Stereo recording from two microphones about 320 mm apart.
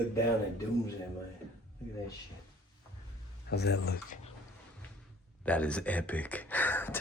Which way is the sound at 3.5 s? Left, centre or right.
Left.